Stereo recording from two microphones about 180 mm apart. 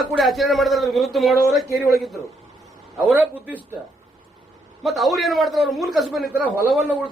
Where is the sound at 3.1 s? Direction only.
10° right (ahead or behind).